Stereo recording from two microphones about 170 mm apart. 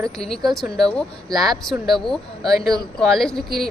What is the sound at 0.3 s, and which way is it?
Speech, centre (ahead or behind).